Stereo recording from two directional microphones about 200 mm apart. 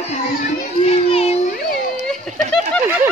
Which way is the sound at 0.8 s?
30° left (ahead or behind).